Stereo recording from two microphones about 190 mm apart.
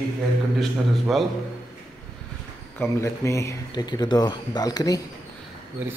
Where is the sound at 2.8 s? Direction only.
15° left (ahead or behind).